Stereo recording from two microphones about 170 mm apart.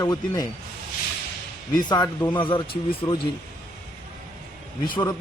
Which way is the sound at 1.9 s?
25° left (ahead or behind).